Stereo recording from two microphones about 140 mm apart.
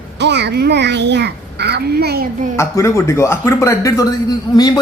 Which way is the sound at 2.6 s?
20° left (ahead or behind).